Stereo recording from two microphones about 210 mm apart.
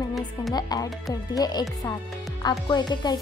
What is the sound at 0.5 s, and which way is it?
Speech, 20° left (ahead or behind).